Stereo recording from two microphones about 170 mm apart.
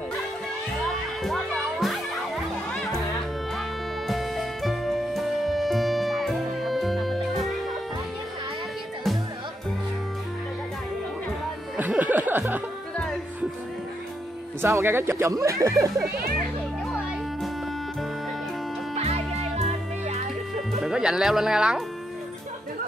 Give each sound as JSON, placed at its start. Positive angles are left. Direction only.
{"t": 1.2, "sound": "speech", "side_deg": 0}
{"t": 2.7, "sound": "music", "side_deg": 5}
{"t": 4.1, "sound": "music", "side_deg": 0}
{"t": 11.7, "sound": "music", "side_deg": -10}
{"t": 12.9, "sound": "music", "side_deg": 5}
{"t": 14.6, "sound": "speech", "side_deg": -15}
{"t": 16.8, "sound": "music", "side_deg": 0}
{"t": 18.9, "sound": "music", "side_deg": -40}
{"t": 20.8, "sound": "speech", "side_deg": -5}